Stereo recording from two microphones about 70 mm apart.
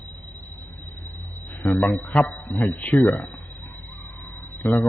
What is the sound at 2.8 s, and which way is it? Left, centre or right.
Speech, left.